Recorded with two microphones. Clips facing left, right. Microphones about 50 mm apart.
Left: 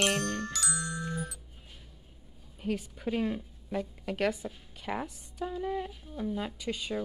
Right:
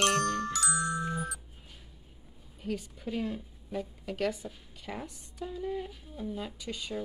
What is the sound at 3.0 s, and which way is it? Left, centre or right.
A woman's voice, left.